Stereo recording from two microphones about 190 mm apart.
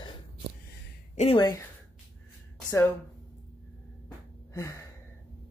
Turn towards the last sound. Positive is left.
turn(degrees=15)  # may be behind; listen again after turning